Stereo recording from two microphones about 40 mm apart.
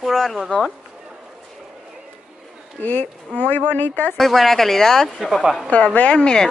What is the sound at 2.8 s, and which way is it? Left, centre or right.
Speech, left.